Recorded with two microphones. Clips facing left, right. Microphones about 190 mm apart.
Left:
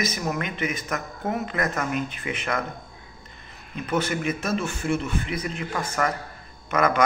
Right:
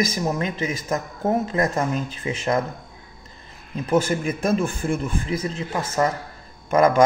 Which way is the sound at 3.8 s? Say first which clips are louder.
Right 5 dB; 30° right (ahead or behind).